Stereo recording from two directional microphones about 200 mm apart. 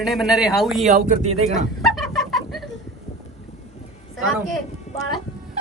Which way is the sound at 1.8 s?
Centre (ahead or behind).